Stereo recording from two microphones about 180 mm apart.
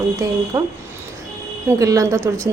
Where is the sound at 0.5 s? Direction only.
15° right (ahead or behind).